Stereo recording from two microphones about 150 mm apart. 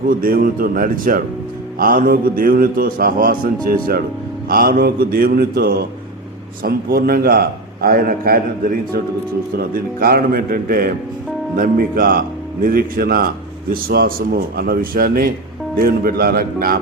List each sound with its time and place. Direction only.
0.1 s a man's voice: 70° right (ahead or behind)
15.8 s a man's voice: 90° right